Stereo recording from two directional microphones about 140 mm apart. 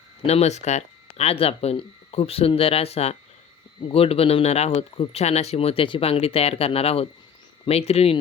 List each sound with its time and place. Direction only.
0.3 s speech: 50° left (ahead or behind)